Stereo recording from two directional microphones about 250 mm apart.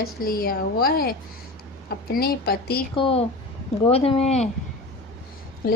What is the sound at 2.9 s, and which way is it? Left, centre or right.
Speech, left.